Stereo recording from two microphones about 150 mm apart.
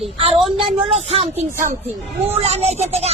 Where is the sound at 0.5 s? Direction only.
35° right (ahead or behind).